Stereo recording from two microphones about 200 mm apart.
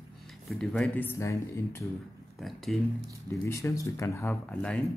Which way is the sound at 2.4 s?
Centre (ahead or behind).